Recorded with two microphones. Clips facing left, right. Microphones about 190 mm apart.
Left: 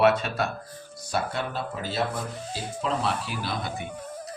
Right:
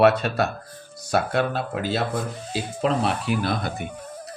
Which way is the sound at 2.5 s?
70° right (ahead or behind).